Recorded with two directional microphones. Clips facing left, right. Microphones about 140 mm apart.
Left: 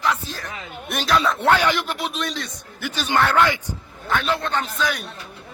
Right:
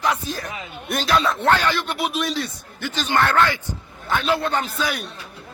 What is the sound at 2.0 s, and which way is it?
Speech, 10° right (ahead or behind).